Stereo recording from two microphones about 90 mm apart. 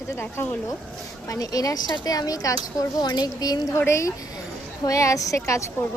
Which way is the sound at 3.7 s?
30° left (ahead or behind).